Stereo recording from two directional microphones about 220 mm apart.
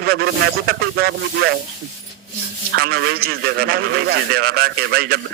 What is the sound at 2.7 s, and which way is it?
A man's voice, 45° right (ahead or behind).